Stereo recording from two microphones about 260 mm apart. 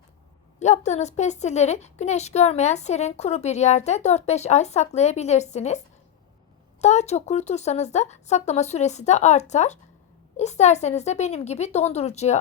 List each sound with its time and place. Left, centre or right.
0.6 s a woman's voice: left
6.8 s a woman's voice: left